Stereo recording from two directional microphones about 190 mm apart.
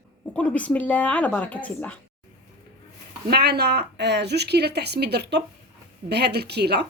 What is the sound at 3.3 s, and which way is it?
A woman's voice, 60° right (ahead or behind).